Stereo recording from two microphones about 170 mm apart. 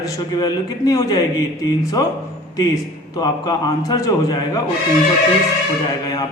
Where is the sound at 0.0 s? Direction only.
20° left (ahead or behind).